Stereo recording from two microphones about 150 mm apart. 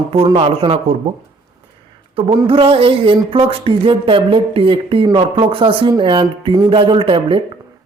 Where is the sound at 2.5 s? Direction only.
40° right (ahead or behind).